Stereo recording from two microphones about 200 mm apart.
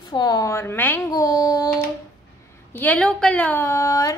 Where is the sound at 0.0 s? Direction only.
20° left (ahead or behind).